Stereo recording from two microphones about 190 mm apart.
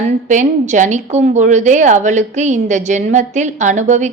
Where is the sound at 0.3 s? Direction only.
40° right (ahead or behind).